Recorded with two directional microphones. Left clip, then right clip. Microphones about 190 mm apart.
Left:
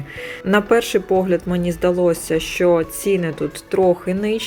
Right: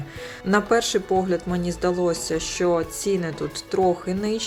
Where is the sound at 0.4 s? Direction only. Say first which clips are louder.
Left 4 dB; 15° left (ahead or behind).